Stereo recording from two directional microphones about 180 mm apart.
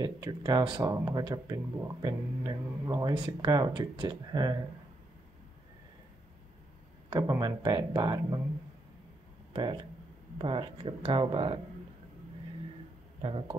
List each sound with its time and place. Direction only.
0.0 s speech: 25° right (ahead or behind)
7.1 s speech: 20° right (ahead or behind)
9.5 s speech: 30° right (ahead or behind)
13.2 s speech: 30° right (ahead or behind)